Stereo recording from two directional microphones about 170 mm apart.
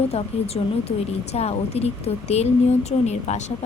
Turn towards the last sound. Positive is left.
turn(degrees=40)  # may be behind; listen again after turning